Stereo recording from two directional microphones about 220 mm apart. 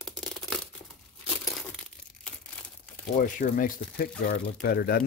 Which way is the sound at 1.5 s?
Centre (ahead or behind).